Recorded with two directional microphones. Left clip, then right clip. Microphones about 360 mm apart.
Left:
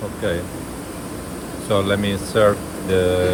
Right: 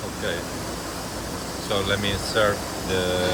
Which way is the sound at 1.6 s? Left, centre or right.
Centre.